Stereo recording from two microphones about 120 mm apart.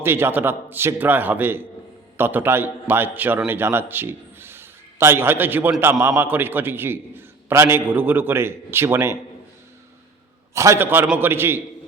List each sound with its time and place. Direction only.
0.0 s a man's voice: 20° right (ahead or behind)
10.5 s a man's voice: 25° right (ahead or behind)